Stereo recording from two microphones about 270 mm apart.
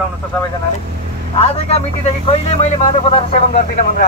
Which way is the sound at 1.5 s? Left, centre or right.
Left.